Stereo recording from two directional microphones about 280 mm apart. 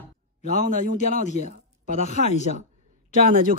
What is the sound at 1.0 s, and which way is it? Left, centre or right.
Speech, left.